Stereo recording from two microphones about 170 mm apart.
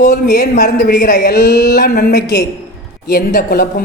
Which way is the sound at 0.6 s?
65° left (ahead or behind).